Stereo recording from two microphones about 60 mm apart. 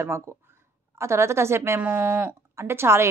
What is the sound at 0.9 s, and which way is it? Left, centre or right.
Speech, right.